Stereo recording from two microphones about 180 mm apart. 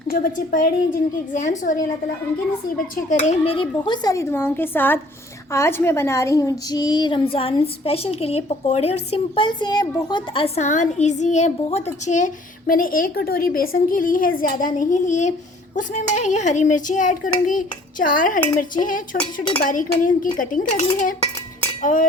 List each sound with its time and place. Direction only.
0.1 s a woman's voice: 55° left (ahead or behind)
1.3 s a woman's voice: 45° left (ahead or behind)
3.2 s a woman's voice: 35° left (ahead or behind)